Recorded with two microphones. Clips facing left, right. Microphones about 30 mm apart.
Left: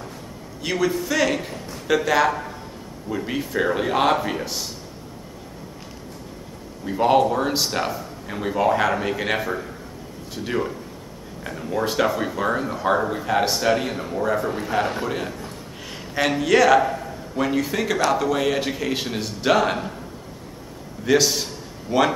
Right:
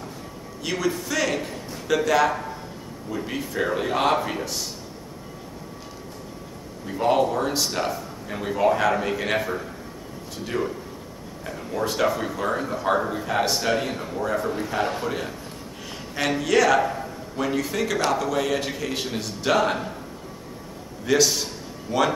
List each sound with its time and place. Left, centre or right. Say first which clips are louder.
0.6 s speech: left 3 dB; centre
6.9 s speech: left 3 dB; centre
21.0 s speech: left 2 dB; centre